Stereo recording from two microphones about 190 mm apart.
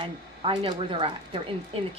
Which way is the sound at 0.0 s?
25° right (ahead or behind).